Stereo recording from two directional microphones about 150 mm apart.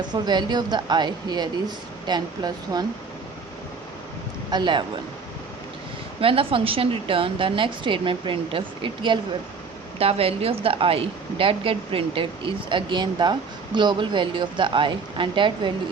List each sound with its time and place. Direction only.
0.0 s a woman's voice: 30° right (ahead or behind)
4.5 s a woman's voice: 30° right (ahead or behind)
6.1 s a woman's voice: 35° right (ahead or behind)